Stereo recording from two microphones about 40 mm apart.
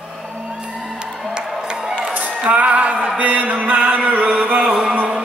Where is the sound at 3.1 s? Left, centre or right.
Right.